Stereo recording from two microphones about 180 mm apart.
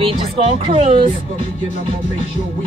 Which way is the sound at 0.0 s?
30° right (ahead or behind).